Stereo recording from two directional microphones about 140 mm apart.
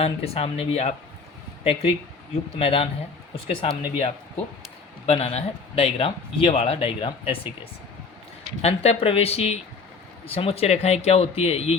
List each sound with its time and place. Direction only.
0.0 s a man's voice: 45° left (ahead or behind)
8.6 s a man's voice: 45° left (ahead or behind)